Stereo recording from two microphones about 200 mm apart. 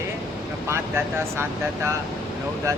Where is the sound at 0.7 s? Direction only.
15° right (ahead or behind).